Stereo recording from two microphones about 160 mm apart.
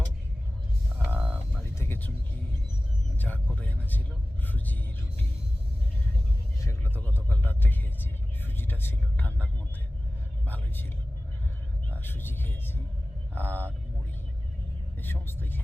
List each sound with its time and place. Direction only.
0.9 s mechanisms: 10° right (ahead or behind)
1.8 s music: 15° left (ahead or behind)
3.2 s vehicle: 10° left (ahead or behind)
6.6 s music: 15° left (ahead or behind)
7.3 s vehicle: 10° left (ahead or behind)
11.9 s vehicle: 10° left (ahead or behind)
15.0 s vehicle: 15° left (ahead or behind)